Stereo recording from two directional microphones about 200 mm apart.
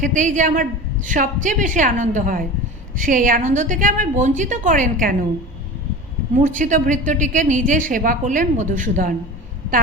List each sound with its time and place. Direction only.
0.0 s a woman's voice: 40° right (ahead or behind)
6.3 s a woman's voice: 40° right (ahead or behind)